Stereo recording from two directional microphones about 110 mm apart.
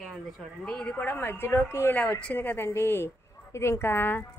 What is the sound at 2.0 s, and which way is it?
A woman's voice, 10° left (ahead or behind).